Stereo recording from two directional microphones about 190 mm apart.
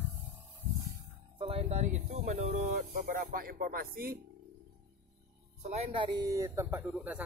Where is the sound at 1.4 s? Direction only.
30° right (ahead or behind).